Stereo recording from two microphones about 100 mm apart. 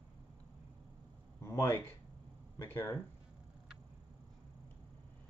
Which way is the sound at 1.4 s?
30° left (ahead or behind).